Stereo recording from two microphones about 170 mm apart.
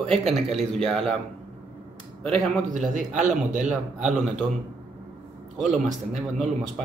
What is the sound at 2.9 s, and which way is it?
Speech, 45° right (ahead or behind).